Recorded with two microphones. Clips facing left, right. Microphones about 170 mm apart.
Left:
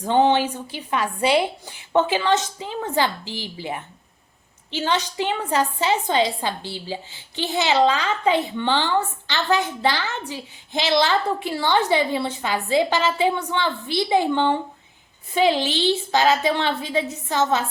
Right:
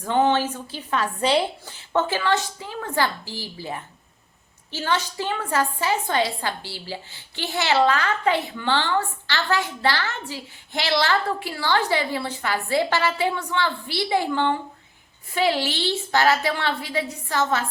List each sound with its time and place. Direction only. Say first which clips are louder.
0.0 s a woman's voice: left 2 dB; 20° left (ahead or behind)